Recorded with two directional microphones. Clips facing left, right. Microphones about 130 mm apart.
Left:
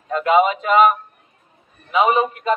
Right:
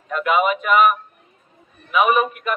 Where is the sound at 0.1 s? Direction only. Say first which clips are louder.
Left 3 dB; 30° left (ahead or behind).